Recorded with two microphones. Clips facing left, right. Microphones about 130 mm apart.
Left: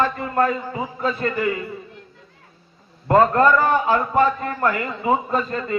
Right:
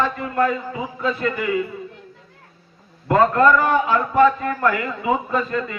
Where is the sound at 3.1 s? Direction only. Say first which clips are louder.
Even; 40° left (ahead or behind).